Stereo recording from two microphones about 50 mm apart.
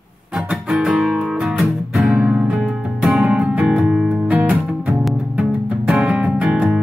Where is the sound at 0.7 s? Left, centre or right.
Centre.